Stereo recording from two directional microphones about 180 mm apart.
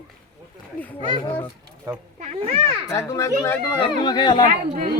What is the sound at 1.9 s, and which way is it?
Speech, 20° right (ahead or behind).